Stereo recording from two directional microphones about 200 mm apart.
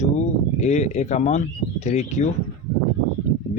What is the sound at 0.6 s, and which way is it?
Speech, 35° left (ahead or behind).